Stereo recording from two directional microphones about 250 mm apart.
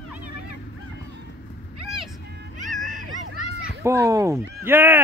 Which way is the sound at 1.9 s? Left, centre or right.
Centre.